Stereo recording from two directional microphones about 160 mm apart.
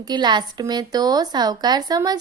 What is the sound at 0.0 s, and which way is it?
Speech, 25° right (ahead or behind).